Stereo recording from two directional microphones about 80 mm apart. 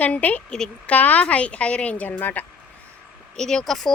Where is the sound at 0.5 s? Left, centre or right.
Centre.